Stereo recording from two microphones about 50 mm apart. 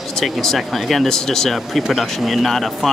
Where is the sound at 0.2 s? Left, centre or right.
Centre.